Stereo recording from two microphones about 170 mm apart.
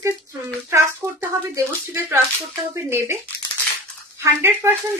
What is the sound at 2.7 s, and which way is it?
Speech, 15° right (ahead or behind).